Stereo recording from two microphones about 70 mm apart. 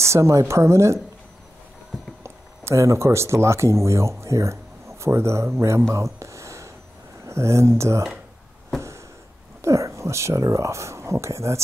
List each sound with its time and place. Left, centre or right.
0.0 s a woman's voice: right
2.2 s speech: right
5.9 s a sound: right
7.2 s a woman's voice: right
9.6 s speech: right